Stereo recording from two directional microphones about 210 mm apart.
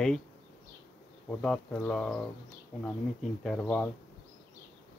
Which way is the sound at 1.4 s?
5° left (ahead or behind).